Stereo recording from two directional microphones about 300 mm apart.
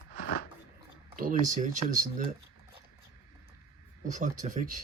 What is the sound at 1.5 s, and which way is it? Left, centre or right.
Speech, right.